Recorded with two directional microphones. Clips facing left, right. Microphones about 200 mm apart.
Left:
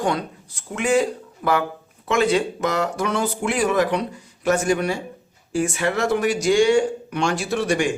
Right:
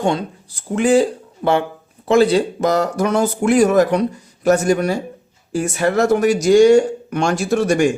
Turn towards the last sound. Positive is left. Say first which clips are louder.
# right 6 dB
turn(degrees=-45)  # may be behind; listen again after turning